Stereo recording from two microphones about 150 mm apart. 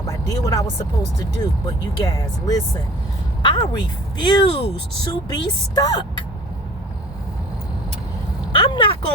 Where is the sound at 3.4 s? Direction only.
30° left (ahead or behind).